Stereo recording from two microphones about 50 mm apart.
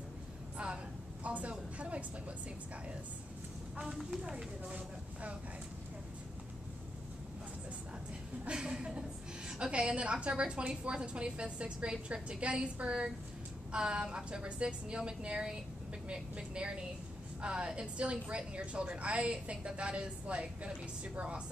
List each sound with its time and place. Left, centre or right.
1.2 s a sound: right
3.8 s speech: centre
8.5 s a woman's voice: centre